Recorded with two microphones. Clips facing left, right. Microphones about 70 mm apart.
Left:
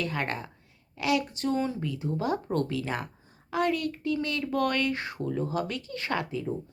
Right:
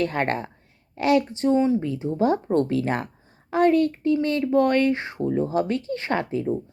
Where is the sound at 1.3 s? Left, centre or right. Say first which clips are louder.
Right 9 dB; right.